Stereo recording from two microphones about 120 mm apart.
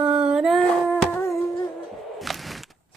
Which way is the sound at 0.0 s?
5° right (ahead or behind).